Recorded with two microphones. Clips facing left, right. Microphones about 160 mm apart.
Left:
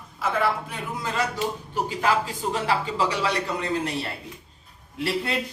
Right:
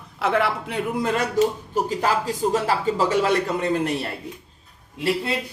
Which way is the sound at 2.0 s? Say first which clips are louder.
Even; 40° right (ahead or behind).